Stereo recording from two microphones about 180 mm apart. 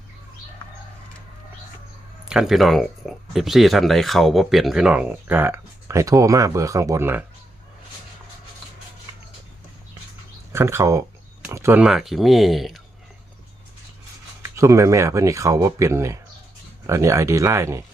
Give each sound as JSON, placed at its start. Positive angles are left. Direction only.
{"t": 2.2, "sound": "speech", "side_deg": -5}
{"t": 10.5, "sound": "speech", "side_deg": -15}
{"t": 14.4, "sound": "speech", "side_deg": -15}